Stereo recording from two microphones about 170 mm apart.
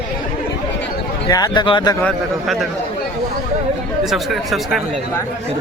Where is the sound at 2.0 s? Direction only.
5° left (ahead or behind).